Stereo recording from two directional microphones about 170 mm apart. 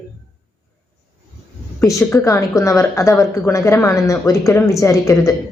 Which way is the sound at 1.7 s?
15° left (ahead or behind).